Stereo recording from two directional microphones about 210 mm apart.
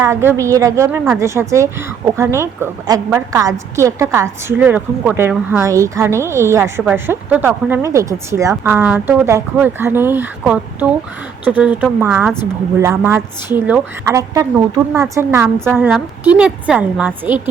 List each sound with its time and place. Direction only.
0.0 s a woman's voice: 10° right (ahead or behind)